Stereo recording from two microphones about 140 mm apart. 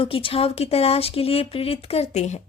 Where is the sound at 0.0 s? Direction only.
40° left (ahead or behind).